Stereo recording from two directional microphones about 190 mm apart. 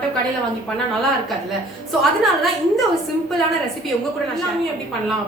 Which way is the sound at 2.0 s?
Centre (ahead or behind).